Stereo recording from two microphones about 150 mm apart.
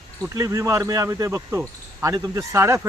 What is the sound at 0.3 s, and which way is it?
Speech, 20° right (ahead or behind).